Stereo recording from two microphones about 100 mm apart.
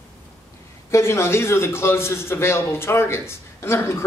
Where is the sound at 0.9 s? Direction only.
30° left (ahead or behind).